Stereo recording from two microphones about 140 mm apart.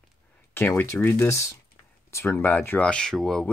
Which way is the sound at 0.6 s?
15° left (ahead or behind).